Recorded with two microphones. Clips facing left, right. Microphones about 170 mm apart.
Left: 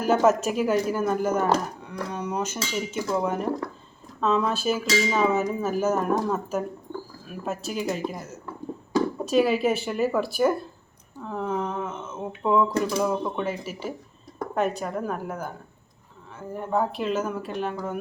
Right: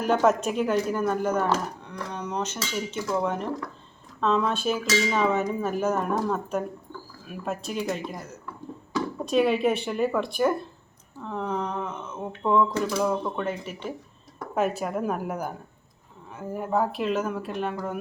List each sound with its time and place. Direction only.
0.0 s speech: 5° left (ahead or behind)
9.2 s a woman's voice: centre (ahead or behind)